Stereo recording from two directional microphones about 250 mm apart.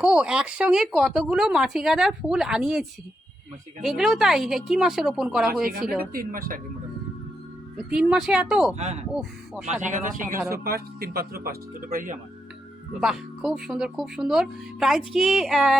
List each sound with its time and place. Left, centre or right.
0.0 s speech: centre
3.8 s speech: centre
6.1 s speech: right
7.9 s speech: centre
8.7 s speech: right
13.0 s speech: centre